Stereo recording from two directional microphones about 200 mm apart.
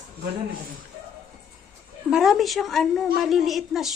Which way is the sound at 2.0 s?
5° right (ahead or behind).